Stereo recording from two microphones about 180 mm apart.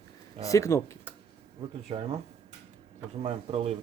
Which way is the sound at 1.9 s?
30° right (ahead or behind).